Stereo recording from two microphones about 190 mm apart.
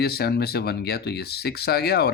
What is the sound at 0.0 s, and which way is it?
Speech, 55° left (ahead or behind).